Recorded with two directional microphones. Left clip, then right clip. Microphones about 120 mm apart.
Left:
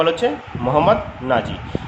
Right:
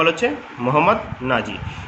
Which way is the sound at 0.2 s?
15° right (ahead or behind).